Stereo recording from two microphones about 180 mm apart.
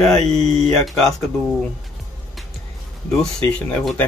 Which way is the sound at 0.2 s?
40° right (ahead or behind).